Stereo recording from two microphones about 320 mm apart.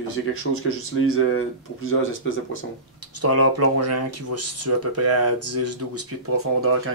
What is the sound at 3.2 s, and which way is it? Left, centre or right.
Speech, right.